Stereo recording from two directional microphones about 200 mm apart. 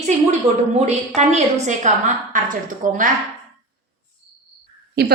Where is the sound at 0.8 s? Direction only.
35° right (ahead or behind).